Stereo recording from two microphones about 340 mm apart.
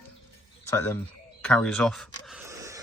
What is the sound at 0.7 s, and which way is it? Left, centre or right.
Speech, centre.